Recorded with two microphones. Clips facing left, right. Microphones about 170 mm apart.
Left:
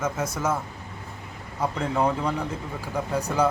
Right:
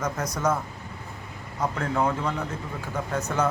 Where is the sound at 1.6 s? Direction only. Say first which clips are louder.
Left 1 dB; 10° left (ahead or behind).